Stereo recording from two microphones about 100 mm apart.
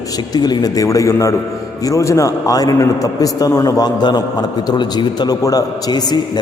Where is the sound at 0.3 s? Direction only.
45° left (ahead or behind).